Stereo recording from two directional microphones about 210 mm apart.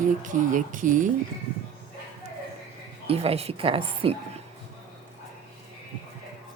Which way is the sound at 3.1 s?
30° right (ahead or behind).